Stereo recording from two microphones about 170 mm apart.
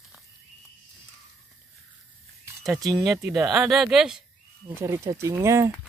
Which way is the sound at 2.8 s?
20° right (ahead or behind).